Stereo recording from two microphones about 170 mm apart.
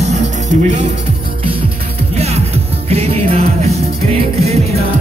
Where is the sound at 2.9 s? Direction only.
35° right (ahead or behind).